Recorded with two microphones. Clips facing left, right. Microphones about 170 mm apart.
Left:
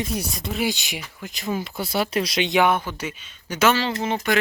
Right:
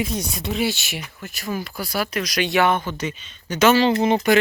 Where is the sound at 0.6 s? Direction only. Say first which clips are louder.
Right 1 dB; 15° left (ahead or behind).